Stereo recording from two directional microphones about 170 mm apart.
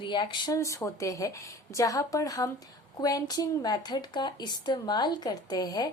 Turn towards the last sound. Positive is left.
turn(degrees=20)  # may be behind; listen again after turning